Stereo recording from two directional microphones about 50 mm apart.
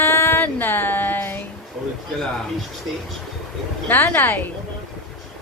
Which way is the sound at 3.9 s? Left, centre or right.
Left.